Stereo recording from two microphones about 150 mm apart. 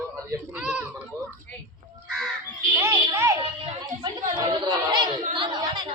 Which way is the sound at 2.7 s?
15° right (ahead or behind).